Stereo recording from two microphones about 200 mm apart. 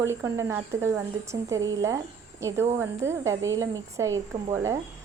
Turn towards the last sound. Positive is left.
turn(degrees=-15)  # may be behind; listen again after turning